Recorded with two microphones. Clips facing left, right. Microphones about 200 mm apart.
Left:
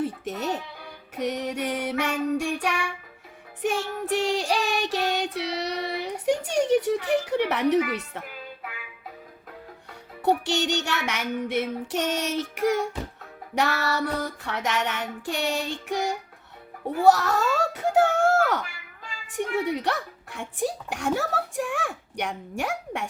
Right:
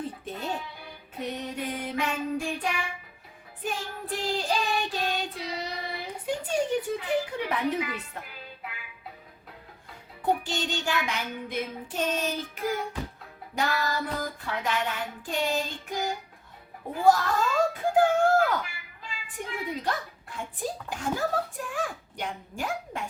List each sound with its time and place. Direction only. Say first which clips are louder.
0.0 s music: left 6 dB; 80° left
1.1 s child singing: left 6 dB; 75° left (ahead or behind)
10.2 s child singing: left 5 dB; 80° left
17.0 s speech: left 3 dB; 75° left (ahead or behind)